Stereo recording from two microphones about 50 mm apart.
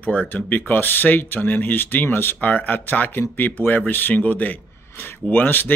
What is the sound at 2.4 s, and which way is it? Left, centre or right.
Speech, left.